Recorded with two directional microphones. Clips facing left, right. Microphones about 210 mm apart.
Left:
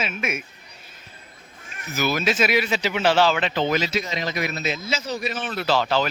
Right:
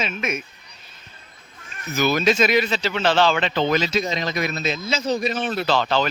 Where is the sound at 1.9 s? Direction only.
5° left (ahead or behind).